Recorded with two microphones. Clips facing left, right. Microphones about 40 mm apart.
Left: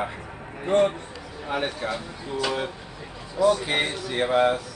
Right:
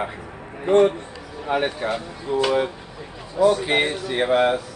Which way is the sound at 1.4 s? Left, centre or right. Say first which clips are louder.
Right 5 dB; centre.